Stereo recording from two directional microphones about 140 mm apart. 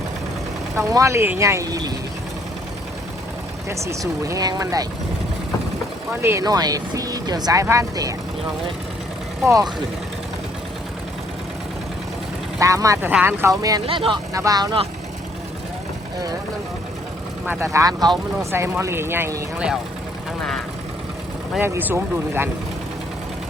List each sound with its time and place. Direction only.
0.8 s speech: 20° right (ahead or behind)
3.7 s speech: 20° right (ahead or behind)
6.4 s speech: 30° right (ahead or behind)
9.5 s speech: 25° right (ahead or behind)
12.5 s speech: 25° right (ahead or behind)
13.8 s speech: 40° right (ahead or behind)
14.3 s speech: 25° right (ahead or behind)
17.4 s speech: 15° right (ahead or behind)
21.6 s speech: 15° right (ahead or behind)